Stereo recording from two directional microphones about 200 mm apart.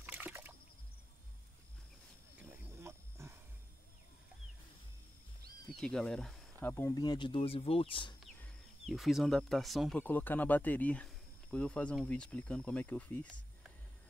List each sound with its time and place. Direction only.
0.0 s a sound: 10° right (ahead or behind)
2.3 s wild animals: 10° right (ahead or behind)
5.8 s speech: 5° left (ahead or behind)
6.7 s speech: 15° left (ahead or behind)
8.4 s speech: centre (ahead or behind)